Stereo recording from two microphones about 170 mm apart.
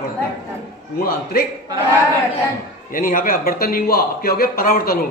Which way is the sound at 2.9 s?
55° left (ahead or behind).